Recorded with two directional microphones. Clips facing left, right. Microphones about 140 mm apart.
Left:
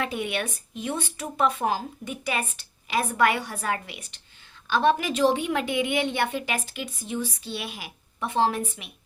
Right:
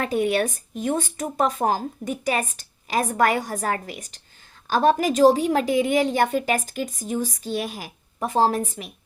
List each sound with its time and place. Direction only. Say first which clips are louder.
0.0 s speech: right 7 dB; 40° right (ahead or behind)